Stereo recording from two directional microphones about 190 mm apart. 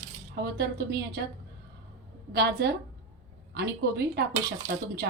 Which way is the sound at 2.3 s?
60° right (ahead or behind).